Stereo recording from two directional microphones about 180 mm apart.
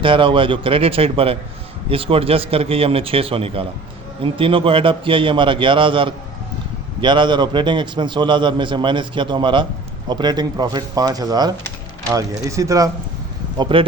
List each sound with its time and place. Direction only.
0.0 s a man's voice: 30° right (ahead or behind)
13.6 s a man's voice: 30° right (ahead or behind)